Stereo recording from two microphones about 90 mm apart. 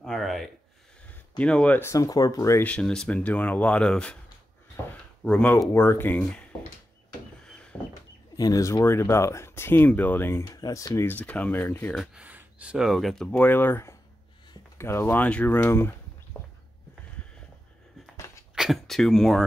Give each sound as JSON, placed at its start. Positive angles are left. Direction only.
{"t": 0.0, "sound": "a sound", "side_deg": 5}
{"t": 1.4, "sound": "speech", "side_deg": 15}
{"t": 1.8, "sound": "speech", "side_deg": 35}
{"t": 2.6, "sound": "speech", "side_deg": 10}
{"t": 5.2, "sound": "speech", "side_deg": 10}
{"t": 5.7, "sound": "speech", "side_deg": 30}
{"t": 7.4, "sound": "a sound", "side_deg": 10}
{"t": 8.4, "sound": "speech", "side_deg": 40}
{"t": 10.4, "sound": "speech", "side_deg": 45}
{"t": 11.1, "sound": "speech", "side_deg": 15}
{"t": 11.9, "sound": "speech", "side_deg": 0}
{"t": 12.2, "sound": "speech", "side_deg": -15}
{"t": 18.1, "sound": "a sound", "side_deg": 35}
{"t": 18.5, "sound": "speech", "side_deg": 0}